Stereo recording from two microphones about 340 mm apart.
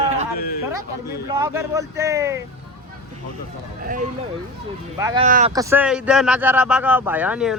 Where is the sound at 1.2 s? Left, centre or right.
Centre.